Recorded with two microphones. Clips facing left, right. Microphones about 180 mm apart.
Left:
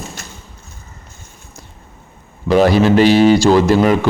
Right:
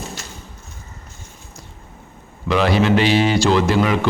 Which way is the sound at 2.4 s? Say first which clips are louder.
Left 5 dB; 40° left (ahead or behind).